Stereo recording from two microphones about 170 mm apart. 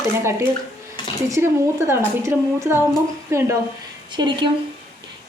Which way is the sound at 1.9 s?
15° right (ahead or behind).